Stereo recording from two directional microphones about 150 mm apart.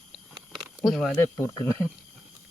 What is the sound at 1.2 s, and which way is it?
Speech, 15° left (ahead or behind).